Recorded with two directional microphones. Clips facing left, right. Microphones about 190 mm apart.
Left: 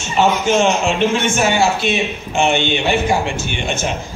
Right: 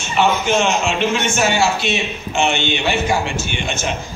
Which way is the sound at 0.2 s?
50° left (ahead or behind).